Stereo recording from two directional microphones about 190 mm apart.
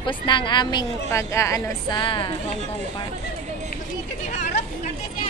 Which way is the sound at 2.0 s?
25° left (ahead or behind).